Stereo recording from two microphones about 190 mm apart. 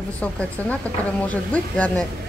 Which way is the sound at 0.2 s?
5° left (ahead or behind).